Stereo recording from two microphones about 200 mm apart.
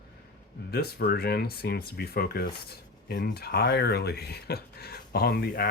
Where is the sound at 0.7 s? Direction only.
50° left (ahead or behind).